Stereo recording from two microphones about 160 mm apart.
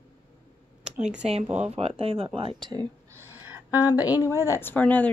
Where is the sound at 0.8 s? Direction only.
5° right (ahead or behind).